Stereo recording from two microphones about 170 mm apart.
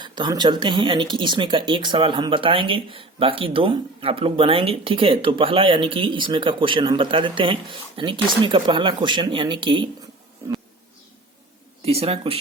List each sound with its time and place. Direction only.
0.0 s speech: 25° right (ahead or behind)
11.9 s speech: 35° right (ahead or behind)